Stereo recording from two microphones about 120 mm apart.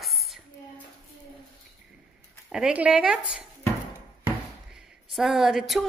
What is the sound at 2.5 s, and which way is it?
Speech, 10° right (ahead or behind).